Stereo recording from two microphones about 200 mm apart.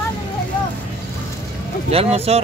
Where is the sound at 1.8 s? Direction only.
30° right (ahead or behind).